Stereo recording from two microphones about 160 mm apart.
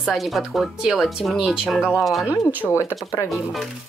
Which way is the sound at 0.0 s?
Centre (ahead or behind).